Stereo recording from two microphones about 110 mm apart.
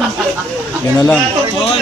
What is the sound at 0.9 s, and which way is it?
Speech, 10° left (ahead or behind).